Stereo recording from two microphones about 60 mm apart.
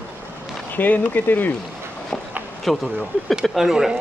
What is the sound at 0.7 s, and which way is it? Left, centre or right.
Speech, left.